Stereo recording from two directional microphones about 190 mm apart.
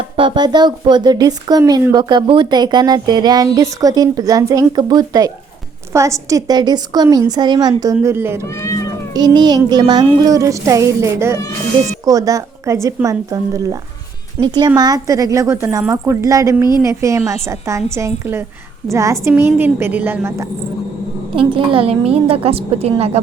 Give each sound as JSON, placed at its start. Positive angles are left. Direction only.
{"t": 0.2, "sound": "speech", "side_deg": -25}
{"t": 8.4, "sound": "speech", "side_deg": 15}
{"t": 9.1, "sound": "speech", "side_deg": -20}
{"t": 21.3, "sound": "a woman's voice", "side_deg": -30}